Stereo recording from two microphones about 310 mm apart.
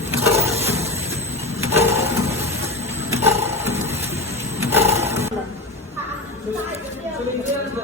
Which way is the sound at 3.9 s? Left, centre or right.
Centre.